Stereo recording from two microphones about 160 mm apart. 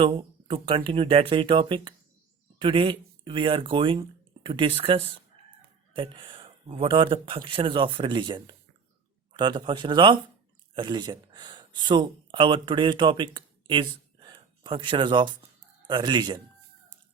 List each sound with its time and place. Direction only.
0.0 s speech: 30° right (ahead or behind)